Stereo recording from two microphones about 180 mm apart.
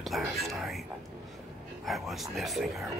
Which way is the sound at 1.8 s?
Centre (ahead or behind).